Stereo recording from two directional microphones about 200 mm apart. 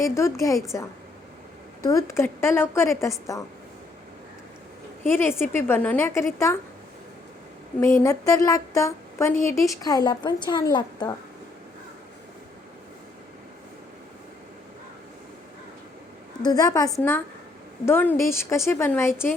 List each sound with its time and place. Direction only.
0.0 s a woman's voice: 15° left (ahead or behind)
1.8 s a woman's voice: 15° left (ahead or behind)
5.0 s a woman's voice: 10° left (ahead or behind)
7.9 s a woman's voice: 15° left (ahead or behind)
16.4 s a woman's voice: 20° left (ahead or behind)